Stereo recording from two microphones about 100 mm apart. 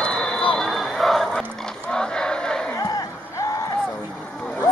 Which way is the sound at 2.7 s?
40° left (ahead or behind).